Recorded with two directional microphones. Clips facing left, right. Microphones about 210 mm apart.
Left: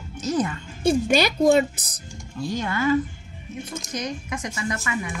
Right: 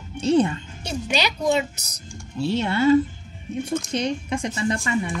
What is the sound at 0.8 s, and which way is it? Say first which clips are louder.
Speech: left 6 dB; 50° left (ahead or behind).